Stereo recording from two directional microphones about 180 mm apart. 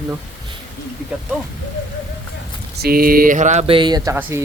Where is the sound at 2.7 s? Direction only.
55° right (ahead or behind); by 4.1 s 25° right (ahead or behind).